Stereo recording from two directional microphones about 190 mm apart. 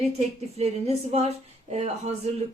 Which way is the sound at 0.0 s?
35° right (ahead or behind).